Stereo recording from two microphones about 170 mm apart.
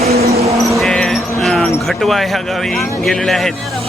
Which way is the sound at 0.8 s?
Centre (ahead or behind).